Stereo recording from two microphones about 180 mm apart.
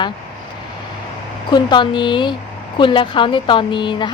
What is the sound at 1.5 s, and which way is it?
Speech, 25° left (ahead or behind).